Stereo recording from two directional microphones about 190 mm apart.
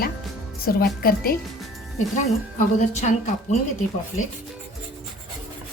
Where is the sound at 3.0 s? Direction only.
35° left (ahead or behind).